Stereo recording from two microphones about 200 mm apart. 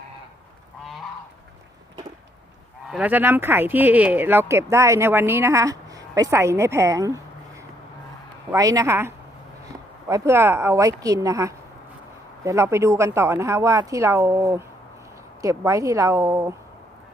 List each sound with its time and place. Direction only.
2.9 s speech: 10° right (ahead or behind)
8.5 s speech: 15° right (ahead or behind)